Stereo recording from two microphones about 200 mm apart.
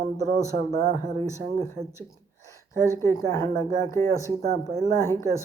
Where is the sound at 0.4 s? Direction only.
20° left (ahead or behind).